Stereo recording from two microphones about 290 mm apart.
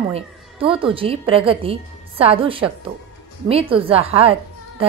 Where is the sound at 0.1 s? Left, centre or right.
Centre.